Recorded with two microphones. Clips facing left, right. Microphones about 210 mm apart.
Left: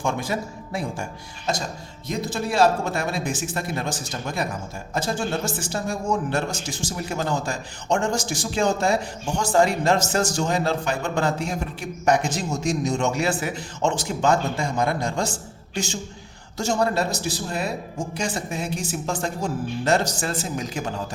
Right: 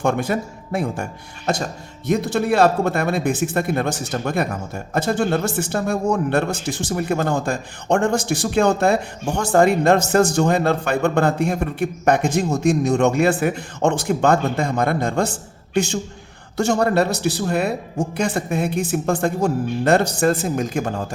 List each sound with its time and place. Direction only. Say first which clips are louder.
0.0 s a man's voice: right 6 dB; 60° right (ahead or behind)
2.0 s a man's voice: right 8 dB; 65° right (ahead or behind)